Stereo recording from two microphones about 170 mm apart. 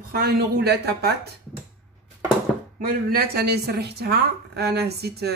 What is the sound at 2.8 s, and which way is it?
Speech, 60° right (ahead or behind).